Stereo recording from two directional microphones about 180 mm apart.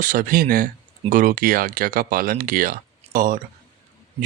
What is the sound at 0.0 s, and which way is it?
Speech, 50° right (ahead or behind).